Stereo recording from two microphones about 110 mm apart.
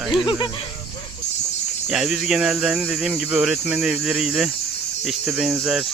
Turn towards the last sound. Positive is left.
turn(degrees=-5)  # may be behind; listen again after turning